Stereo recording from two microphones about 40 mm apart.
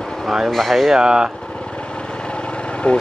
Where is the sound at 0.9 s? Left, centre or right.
Centre.